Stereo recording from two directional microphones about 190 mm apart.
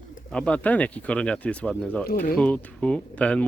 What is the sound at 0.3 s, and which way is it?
Speech, 5° left (ahead or behind).